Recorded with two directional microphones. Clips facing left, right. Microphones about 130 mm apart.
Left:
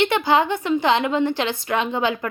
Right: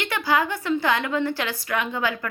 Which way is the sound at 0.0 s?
25° left (ahead or behind).